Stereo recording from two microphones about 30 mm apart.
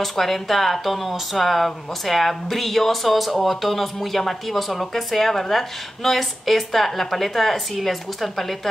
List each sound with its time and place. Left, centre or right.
0.0 s speech: centre